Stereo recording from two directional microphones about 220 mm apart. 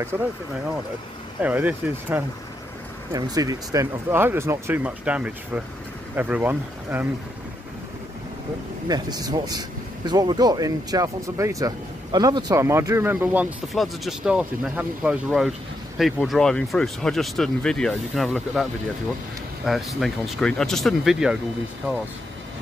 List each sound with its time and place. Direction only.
0.1 s speech: 10° right (ahead or behind)
1.4 s speech: 5° right (ahead or behind)
8.8 s speech: 20° right (ahead or behind); by 21.4 s centre (ahead or behind)